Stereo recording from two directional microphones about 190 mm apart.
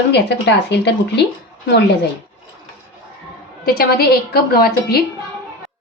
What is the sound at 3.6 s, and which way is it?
A woman's voice, 55° left (ahead or behind).